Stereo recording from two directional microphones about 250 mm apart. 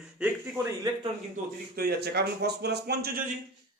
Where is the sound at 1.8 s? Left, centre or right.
Right.